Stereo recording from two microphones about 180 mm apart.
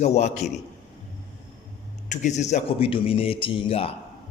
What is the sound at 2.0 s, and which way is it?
A man's voice, 40° left (ahead or behind).